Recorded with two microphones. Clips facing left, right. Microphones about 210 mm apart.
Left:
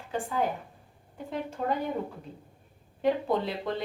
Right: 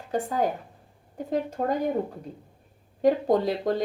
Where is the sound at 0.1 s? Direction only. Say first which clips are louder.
Right 4 dB; 40° right (ahead or behind).